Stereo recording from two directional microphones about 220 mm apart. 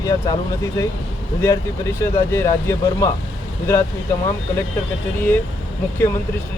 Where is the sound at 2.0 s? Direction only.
10° left (ahead or behind).